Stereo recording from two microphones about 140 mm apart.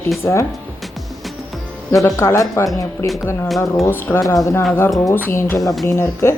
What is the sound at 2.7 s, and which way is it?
Speech, centre (ahead or behind).